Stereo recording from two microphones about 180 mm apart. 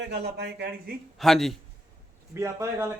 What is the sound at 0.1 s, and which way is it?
Speech, 65° right (ahead or behind).